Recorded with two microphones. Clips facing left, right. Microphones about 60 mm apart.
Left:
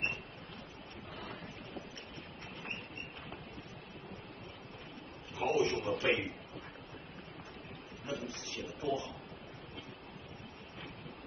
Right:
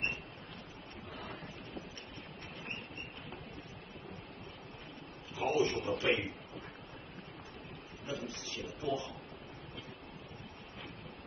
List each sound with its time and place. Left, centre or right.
5.4 s a man's voice: left
8.8 s speech: left